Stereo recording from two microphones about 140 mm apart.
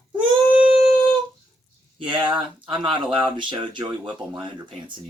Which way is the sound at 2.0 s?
35° right (ahead or behind).